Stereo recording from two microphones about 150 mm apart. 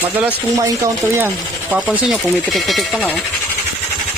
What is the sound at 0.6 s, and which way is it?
Speech, 25° right (ahead or behind).